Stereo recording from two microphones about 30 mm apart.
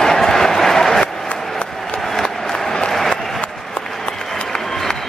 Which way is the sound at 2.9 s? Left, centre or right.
Centre.